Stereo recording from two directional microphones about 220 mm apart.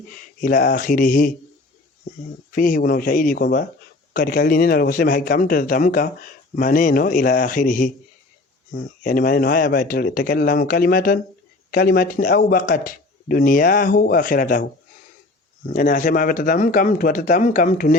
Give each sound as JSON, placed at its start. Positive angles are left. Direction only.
{"t": 0.4, "sound": "speech", "side_deg": 40}
{"t": 2.6, "sound": "speech", "side_deg": 40}
{"t": 15.7, "sound": "speech", "side_deg": 35}